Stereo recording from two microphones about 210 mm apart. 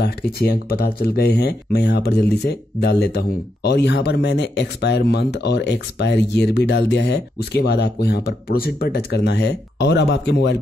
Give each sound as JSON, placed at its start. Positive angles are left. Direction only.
{"t": 0.0, "sound": "speech", "side_deg": 45}